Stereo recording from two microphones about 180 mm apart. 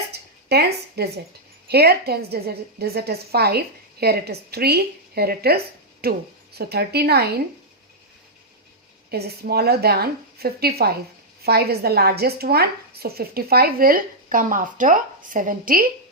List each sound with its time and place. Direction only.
0.1 s a sound: 65° right (ahead or behind)
1.6 s speech: 60° right (ahead or behind)
9.0 s speech: 60° right (ahead or behind)